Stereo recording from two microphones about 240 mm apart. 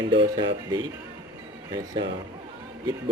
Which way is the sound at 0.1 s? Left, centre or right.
Centre.